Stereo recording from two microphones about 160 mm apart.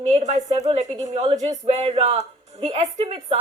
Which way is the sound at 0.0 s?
45° right (ahead or behind).